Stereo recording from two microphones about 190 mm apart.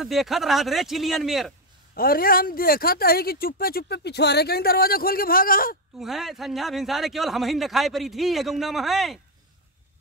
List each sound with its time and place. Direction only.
0.0 s a man's voice: centre (ahead or behind)
2.0 s speech: 50° left (ahead or behind)
5.9 s a man's voice: centre (ahead or behind)